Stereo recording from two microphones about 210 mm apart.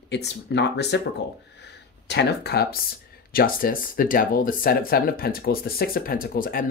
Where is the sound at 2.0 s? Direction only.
50° left (ahead or behind).